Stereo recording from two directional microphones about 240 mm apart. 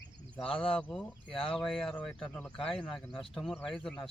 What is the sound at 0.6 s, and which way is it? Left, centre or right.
Speech, centre.